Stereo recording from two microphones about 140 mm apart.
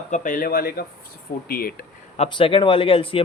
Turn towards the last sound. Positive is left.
turn(degrees=40)  # may be behind; listen again after turning